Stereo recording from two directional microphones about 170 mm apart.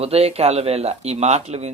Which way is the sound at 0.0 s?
35° right (ahead or behind).